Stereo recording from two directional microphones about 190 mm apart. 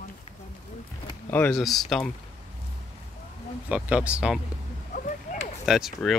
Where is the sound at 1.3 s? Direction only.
10° left (ahead or behind).